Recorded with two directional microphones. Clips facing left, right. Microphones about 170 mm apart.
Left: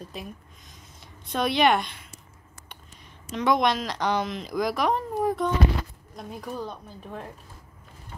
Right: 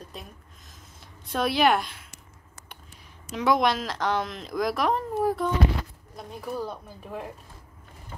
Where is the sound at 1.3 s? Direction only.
Centre (ahead or behind).